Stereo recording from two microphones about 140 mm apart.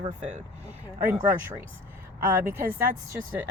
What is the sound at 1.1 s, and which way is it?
Speech, 15° right (ahead or behind).